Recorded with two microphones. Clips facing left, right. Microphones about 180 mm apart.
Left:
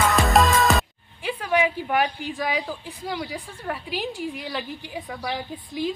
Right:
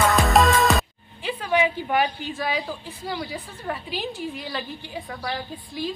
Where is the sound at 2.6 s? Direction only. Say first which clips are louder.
Even; centre (ahead or behind).